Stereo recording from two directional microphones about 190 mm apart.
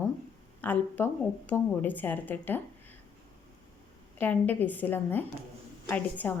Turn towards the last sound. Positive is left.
turn(degrees=10)  # may be behind; listen again after turning